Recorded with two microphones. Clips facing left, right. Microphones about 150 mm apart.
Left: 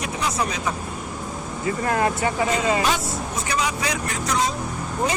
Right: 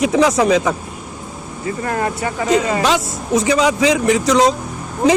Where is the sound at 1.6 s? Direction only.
40° right (ahead or behind).